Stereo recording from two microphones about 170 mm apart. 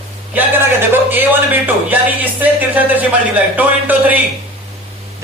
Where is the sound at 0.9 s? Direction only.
10° right (ahead or behind).